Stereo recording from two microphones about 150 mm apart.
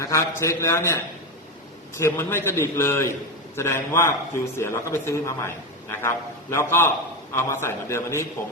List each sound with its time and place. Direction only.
0.0 s a man's voice: 20° left (ahead or behind)
2.0 s a man's voice: 15° left (ahead or behind)